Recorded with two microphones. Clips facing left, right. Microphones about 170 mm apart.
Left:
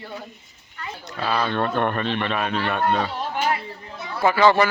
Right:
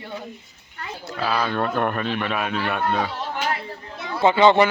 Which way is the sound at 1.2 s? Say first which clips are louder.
Even; 5° right (ahead or behind).